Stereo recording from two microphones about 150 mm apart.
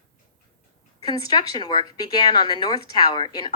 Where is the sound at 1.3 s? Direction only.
25° left (ahead or behind).